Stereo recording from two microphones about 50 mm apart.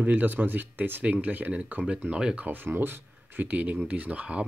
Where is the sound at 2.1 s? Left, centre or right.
Centre.